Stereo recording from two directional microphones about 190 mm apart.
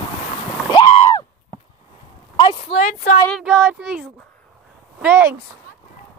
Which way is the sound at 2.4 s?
30° left (ahead or behind).